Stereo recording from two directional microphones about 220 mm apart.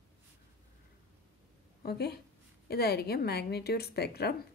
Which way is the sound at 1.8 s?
45° left (ahead or behind).